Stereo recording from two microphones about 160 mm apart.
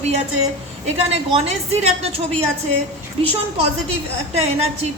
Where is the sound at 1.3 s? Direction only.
40° right (ahead or behind).